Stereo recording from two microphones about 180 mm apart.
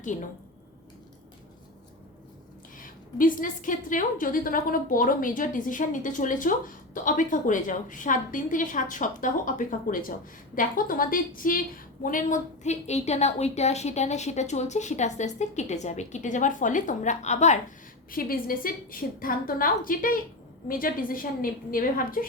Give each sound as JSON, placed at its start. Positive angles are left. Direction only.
{"t": 0.0, "sound": "speech", "side_deg": 45}
{"t": 2.7, "sound": "a woman's voice", "side_deg": 50}
{"t": 18.1, "sound": "a woman's voice", "side_deg": 55}